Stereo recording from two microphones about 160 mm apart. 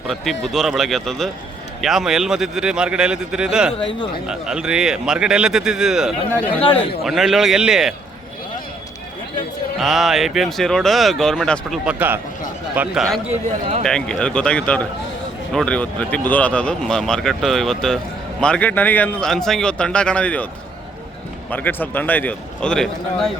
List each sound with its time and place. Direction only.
0.1 s speech: centre (ahead or behind)
6.6 s speech: 35° left (ahead or behind)
7.0 s speech: centre (ahead or behind)
9.7 s speech: centre (ahead or behind)
11.9 s speech: 10° right (ahead or behind); by 20.5 s 10° left (ahead or behind)
21.5 s a man's voice: 10° left (ahead or behind)